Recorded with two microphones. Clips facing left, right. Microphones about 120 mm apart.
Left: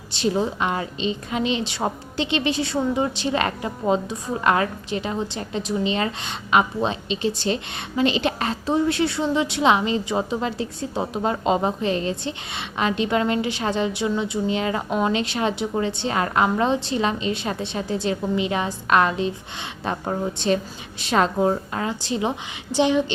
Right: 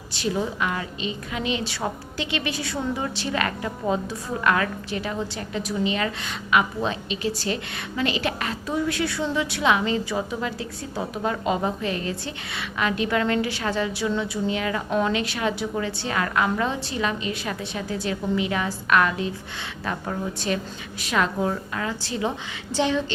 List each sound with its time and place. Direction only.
0.1 s a woman's voice: 25° left (ahead or behind)